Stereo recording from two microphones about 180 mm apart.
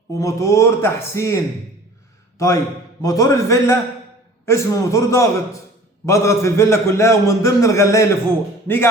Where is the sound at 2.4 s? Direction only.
15° left (ahead or behind).